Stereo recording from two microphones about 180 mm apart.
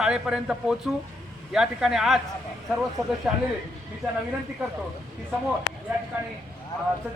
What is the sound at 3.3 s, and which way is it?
Speech, 5° right (ahead or behind).